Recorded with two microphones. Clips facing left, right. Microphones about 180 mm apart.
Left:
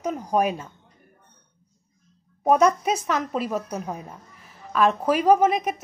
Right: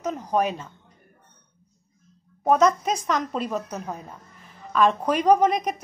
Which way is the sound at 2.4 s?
10° left (ahead or behind).